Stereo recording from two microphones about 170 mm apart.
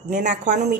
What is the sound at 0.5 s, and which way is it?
Speech, 75° right (ahead or behind).